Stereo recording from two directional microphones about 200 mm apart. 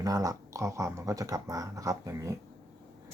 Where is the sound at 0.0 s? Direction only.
20° right (ahead or behind).